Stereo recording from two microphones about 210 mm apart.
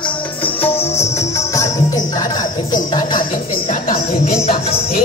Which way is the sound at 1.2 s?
15° left (ahead or behind).